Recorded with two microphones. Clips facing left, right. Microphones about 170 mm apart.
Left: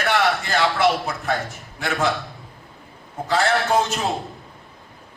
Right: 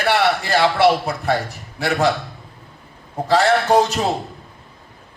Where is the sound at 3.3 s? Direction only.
35° right (ahead or behind).